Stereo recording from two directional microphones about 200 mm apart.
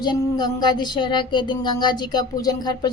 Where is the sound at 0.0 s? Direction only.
20° left (ahead or behind).